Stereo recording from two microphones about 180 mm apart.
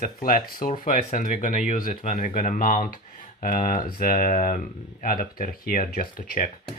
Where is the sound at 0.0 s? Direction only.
50° left (ahead or behind).